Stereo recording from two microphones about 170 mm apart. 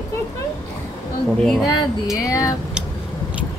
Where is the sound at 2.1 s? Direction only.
20° left (ahead or behind).